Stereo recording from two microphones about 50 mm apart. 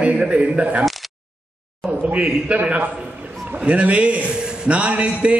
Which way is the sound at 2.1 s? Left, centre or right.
Right.